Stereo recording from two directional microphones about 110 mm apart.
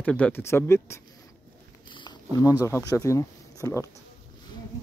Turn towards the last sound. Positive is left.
turn(degrees=30)  # may be behind; listen again after turning